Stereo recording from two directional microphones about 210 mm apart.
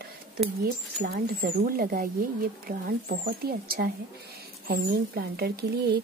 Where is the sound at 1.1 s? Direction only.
45° right (ahead or behind).